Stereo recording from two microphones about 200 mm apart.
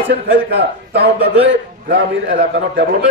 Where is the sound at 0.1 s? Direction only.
55° right (ahead or behind).